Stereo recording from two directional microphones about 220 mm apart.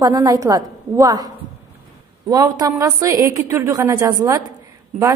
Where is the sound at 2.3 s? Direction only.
15° right (ahead or behind).